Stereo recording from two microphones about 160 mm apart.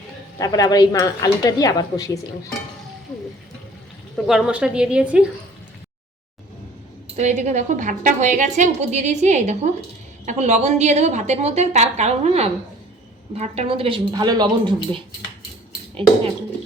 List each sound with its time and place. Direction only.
0.3 s a woman's voice: 20° left (ahead or behind)
4.3 s a woman's voice: 5° right (ahead or behind)
7.2 s a woman's voice: 45° right (ahead or behind); by 15.0 s 25° right (ahead or behind)